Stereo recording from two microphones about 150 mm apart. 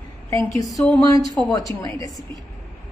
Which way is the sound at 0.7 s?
Centre (ahead or behind).